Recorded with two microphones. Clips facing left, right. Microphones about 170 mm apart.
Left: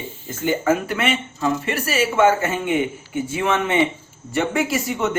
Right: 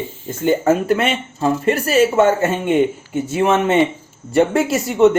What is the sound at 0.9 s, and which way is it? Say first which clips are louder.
A woman's voice: right 4 dB; 40° right (ahead or behind).